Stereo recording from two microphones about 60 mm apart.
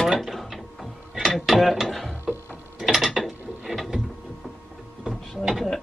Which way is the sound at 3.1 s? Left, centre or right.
Centre.